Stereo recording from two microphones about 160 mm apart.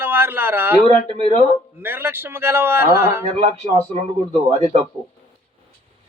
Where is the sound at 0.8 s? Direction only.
40° right (ahead or behind).